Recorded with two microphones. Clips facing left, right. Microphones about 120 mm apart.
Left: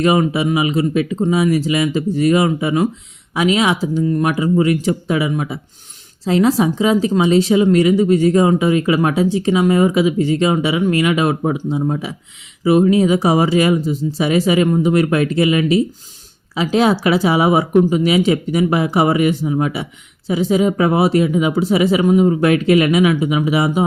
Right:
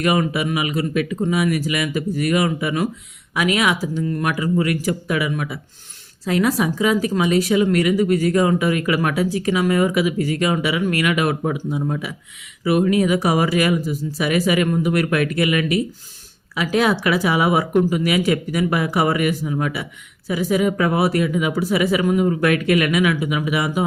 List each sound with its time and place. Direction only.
0.0 s speech: 25° left (ahead or behind)